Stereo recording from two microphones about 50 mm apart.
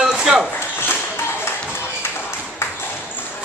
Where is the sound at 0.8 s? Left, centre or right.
Left.